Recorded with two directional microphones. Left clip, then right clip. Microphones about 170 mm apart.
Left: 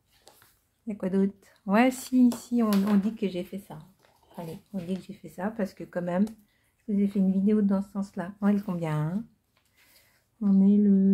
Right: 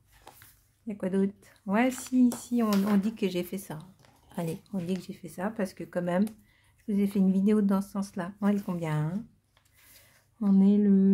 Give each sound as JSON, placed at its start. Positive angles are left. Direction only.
{"t": 0.8, "sound": "speech", "side_deg": 0}
{"t": 1.7, "sound": "speech", "side_deg": 10}
{"t": 2.8, "sound": "speech", "side_deg": -15}
{"t": 3.3, "sound": "speech", "side_deg": -35}
{"t": 4.8, "sound": "speech", "side_deg": -25}
{"t": 6.9, "sound": "speech", "side_deg": -30}
{"t": 8.1, "sound": "speech", "side_deg": -15}
{"t": 10.4, "sound": "speech", "side_deg": -25}